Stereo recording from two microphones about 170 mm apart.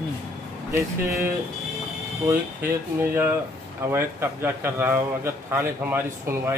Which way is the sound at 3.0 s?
15° right (ahead or behind).